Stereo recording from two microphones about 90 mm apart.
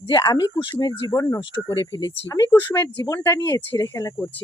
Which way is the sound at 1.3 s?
65° left (ahead or behind).